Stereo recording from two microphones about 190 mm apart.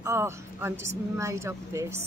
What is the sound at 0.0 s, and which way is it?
A woman's voice, 15° right (ahead or behind).